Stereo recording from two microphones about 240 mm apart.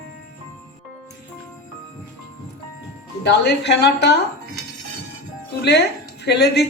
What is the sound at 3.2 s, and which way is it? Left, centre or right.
Speech, left.